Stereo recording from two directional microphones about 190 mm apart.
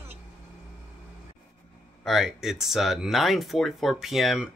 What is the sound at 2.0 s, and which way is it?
Speech, centre (ahead or behind).